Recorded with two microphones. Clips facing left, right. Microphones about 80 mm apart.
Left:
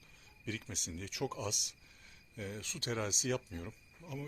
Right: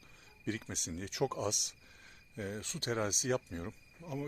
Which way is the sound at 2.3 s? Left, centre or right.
Right.